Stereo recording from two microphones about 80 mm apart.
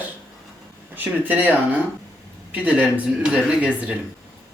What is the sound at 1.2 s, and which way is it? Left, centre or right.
Speech, right.